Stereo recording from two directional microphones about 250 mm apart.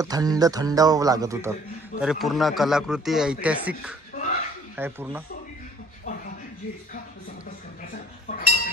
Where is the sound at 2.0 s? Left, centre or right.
Centre.